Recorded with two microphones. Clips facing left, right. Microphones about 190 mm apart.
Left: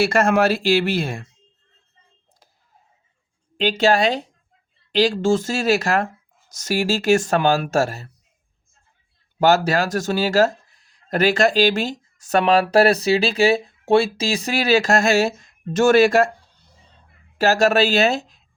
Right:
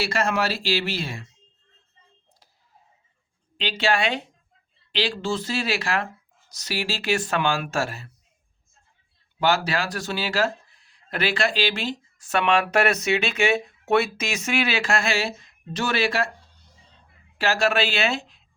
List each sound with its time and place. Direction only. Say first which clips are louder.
0.0 s speech: left 7 dB; 50° left (ahead or behind)
3.6 s speech: left 6 dB; 45° left (ahead or behind)
9.4 s speech: left 6 dB; 45° left (ahead or behind)
17.3 s speech: left 6 dB; 40° left (ahead or behind)